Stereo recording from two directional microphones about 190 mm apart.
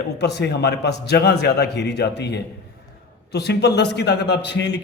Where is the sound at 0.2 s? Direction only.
60° left (ahead or behind).